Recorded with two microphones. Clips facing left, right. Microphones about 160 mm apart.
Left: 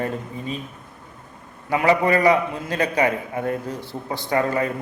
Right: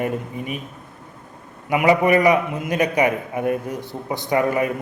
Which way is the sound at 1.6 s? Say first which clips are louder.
Right 2 dB; 15° right (ahead or behind).